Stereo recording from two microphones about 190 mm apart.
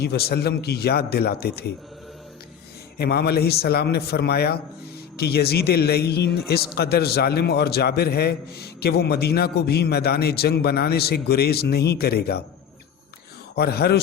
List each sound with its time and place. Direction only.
0.0 s a man's voice: 55° left (ahead or behind)
3.0 s a man's voice: 60° left (ahead or behind)
13.6 s a man's voice: 55° left (ahead or behind)